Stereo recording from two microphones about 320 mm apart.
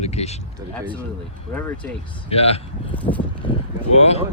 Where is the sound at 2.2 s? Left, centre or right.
Centre.